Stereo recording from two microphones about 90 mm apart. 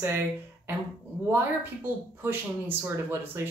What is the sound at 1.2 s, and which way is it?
Speech, 25° right (ahead or behind).